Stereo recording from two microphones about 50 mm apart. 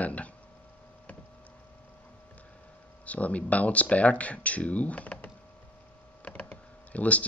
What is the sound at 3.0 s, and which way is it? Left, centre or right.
Speech, left.